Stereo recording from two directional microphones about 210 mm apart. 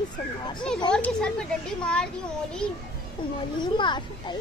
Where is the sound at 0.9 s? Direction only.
5° left (ahead or behind).